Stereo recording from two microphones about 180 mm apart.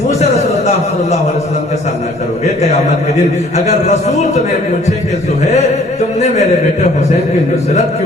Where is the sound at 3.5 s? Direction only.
35° left (ahead or behind).